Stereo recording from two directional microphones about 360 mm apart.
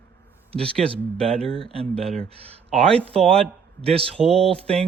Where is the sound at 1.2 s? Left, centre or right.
Centre.